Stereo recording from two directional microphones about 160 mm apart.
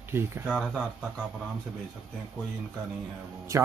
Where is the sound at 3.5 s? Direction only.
20° right (ahead or behind).